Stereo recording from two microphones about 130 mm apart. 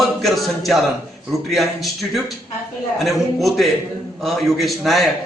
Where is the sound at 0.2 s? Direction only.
Centre (ahead or behind).